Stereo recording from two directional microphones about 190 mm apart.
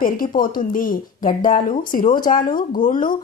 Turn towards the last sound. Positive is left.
turn(degrees=45)  # may be behind; listen again after turning